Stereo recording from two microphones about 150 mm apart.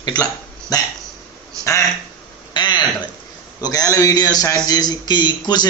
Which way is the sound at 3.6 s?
25° left (ahead or behind).